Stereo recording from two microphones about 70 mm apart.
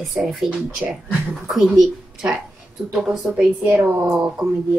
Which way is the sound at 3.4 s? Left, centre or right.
Right.